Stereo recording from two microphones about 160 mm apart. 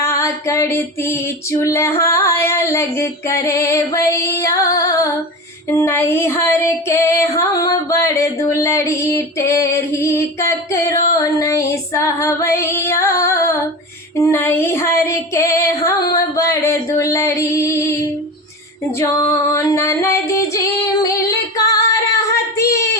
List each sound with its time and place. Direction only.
0.0 s music: 20° left (ahead or behind)
18.9 s singing: 20° left (ahead or behind)